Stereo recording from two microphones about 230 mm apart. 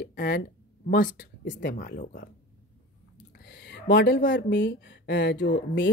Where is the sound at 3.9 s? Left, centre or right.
Left.